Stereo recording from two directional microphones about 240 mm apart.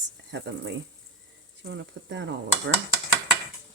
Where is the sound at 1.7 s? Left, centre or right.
Right.